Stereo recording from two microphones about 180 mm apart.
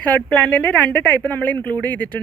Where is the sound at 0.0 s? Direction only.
10° left (ahead or behind).